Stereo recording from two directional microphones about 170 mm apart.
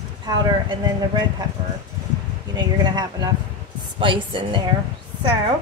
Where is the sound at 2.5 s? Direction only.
25° right (ahead or behind).